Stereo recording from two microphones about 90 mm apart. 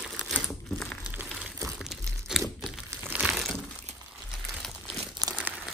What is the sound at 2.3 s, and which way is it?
Crumpling, 5° right (ahead or behind).